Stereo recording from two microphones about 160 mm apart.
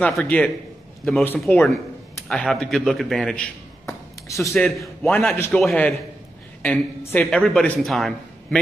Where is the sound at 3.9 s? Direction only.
20° left (ahead or behind).